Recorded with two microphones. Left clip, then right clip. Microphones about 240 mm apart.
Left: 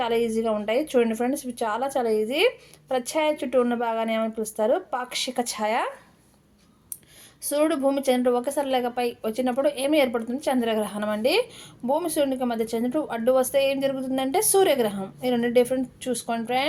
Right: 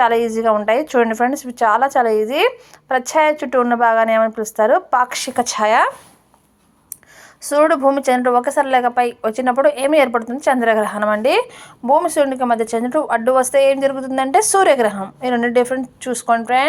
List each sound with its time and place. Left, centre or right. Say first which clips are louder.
0.0 s a woman's voice: right 9 dB; centre
7.4 s a woman's voice: right 9 dB; centre